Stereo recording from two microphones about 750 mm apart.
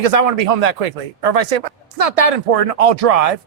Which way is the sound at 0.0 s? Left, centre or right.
Right.